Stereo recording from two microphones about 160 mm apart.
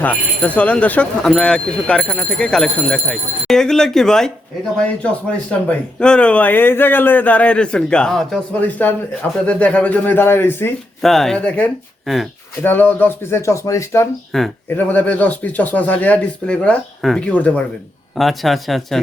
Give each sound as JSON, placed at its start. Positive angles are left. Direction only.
{"t": 0.0, "sound": "speech", "side_deg": 10}
{"t": 5.5, "sound": "speech", "side_deg": 5}
{"t": 11.0, "sound": "speech", "side_deg": 0}
{"t": 12.6, "sound": "speech", "side_deg": 10}
{"t": 14.3, "sound": "speech", "side_deg": 0}